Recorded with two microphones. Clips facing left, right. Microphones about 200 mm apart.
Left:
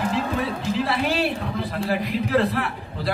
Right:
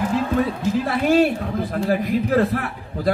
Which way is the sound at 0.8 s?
45° right (ahead or behind).